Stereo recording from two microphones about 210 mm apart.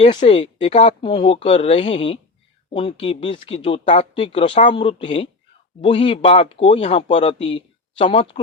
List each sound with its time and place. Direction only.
0.0 s speech: 35° left (ahead or behind)